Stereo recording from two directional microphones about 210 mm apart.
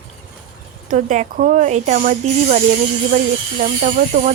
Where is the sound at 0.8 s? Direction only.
35° right (ahead or behind).